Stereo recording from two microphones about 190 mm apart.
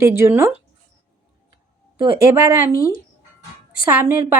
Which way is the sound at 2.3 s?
15° right (ahead or behind).